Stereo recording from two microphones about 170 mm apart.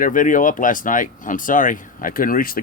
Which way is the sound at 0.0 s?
50° left (ahead or behind).